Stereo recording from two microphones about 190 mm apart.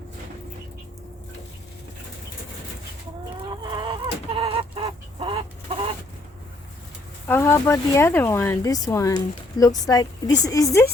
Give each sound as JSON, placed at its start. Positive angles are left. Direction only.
{"t": 3.5, "sound": "chicken", "side_deg": -25}
{"t": 7.3, "sound": "speech", "side_deg": 15}